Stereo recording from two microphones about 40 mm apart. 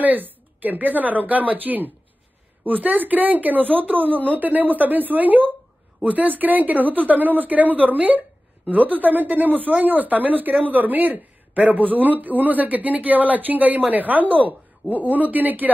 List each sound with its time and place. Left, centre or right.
0.0 s speech: right